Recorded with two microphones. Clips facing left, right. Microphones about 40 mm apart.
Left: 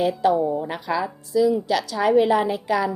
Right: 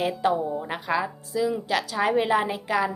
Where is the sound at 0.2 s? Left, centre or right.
Centre.